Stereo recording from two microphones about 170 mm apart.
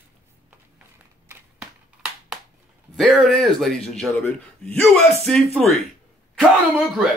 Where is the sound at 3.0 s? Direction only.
5° right (ahead or behind).